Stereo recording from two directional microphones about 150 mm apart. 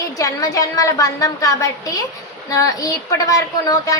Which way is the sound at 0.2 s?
20° left (ahead or behind).